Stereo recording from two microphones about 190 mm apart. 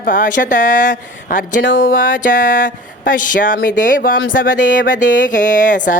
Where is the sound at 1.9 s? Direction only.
45° left (ahead or behind).